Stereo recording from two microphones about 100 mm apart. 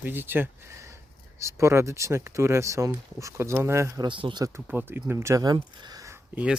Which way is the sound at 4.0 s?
55° right (ahead or behind).